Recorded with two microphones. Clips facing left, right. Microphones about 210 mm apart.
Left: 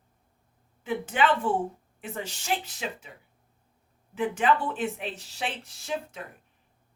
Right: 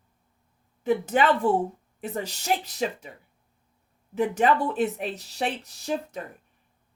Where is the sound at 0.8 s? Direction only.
40° right (ahead or behind).